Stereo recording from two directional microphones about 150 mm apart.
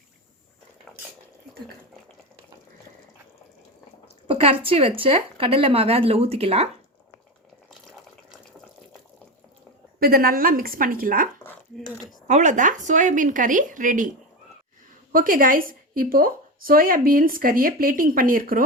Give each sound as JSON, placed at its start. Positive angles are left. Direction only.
{"t": 4.3, "sound": "a woman's voice", "side_deg": -40}
{"t": 10.0, "sound": "a woman's voice", "side_deg": -80}
{"t": 12.3, "sound": "speech", "side_deg": -55}
{"t": 15.1, "sound": "a woman's voice", "side_deg": -70}